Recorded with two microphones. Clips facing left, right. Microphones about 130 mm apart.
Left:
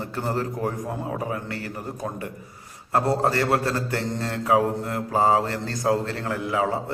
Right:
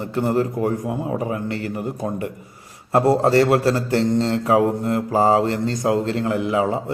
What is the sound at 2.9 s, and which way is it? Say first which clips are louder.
Speech: right 6 dB; 25° right (ahead or behind).